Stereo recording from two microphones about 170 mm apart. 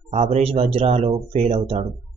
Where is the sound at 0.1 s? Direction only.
40° right (ahead or behind).